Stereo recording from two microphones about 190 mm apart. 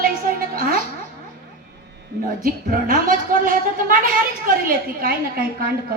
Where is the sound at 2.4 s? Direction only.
50° right (ahead or behind).